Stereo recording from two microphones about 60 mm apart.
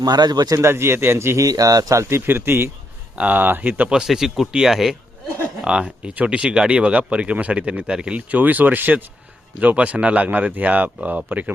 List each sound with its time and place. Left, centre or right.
0.0 s a man's voice: right
0.6 s a man's voice: right
1.4 s speech: right
2.0 s speech: right
3.9 s speech: centre
5.6 s speech: centre